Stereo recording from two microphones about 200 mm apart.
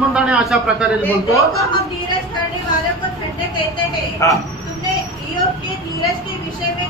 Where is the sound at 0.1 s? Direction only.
5° right (ahead or behind).